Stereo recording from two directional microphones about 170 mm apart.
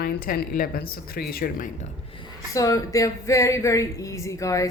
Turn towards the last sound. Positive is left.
turn(degrees=20)  # may be behind; listen again after turning